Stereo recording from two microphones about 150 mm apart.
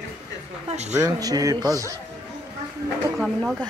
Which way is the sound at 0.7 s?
50° right (ahead or behind).